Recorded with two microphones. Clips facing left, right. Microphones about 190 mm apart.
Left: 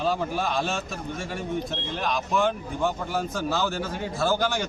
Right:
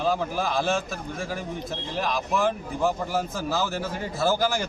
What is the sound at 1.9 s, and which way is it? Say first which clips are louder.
Speech: even; centre (ahead or behind).